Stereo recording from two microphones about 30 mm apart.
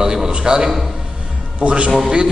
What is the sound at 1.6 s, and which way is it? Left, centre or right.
Speech, right.